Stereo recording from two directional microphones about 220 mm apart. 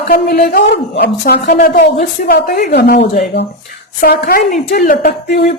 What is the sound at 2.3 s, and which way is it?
Speech, 40° left (ahead or behind).